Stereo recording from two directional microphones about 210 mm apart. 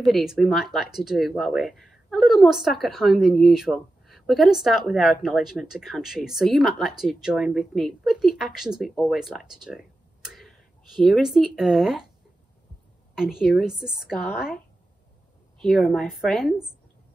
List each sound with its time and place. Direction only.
0.0 s a woman's voice: centre (ahead or behind)
10.2 s tick-tock: centre (ahead or behind)
11.0 s a woman's voice: centre (ahead or behind)
13.1 s a woman's voice: 5° right (ahead or behind)
15.6 s a woman's voice: centre (ahead or behind)